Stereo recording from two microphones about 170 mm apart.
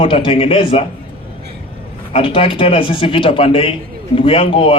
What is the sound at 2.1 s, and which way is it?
A man's voice, 30° left (ahead or behind).